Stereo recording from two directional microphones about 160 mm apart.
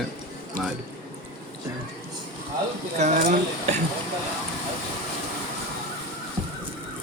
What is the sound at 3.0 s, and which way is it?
Speech, 45° right (ahead or behind).